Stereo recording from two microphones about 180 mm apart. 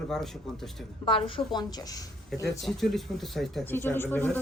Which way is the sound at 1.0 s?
25° left (ahead or behind).